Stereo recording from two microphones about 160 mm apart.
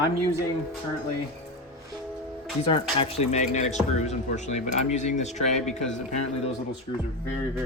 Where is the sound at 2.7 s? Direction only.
35° left (ahead or behind).